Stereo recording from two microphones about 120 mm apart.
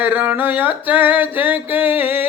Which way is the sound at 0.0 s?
15° right (ahead or behind).